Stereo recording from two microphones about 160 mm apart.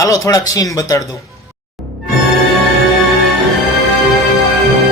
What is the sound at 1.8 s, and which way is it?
Music, centre (ahead or behind).